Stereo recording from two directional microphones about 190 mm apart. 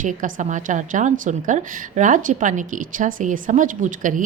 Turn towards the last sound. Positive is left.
turn(degrees=-45)  # may be behind; listen again after turning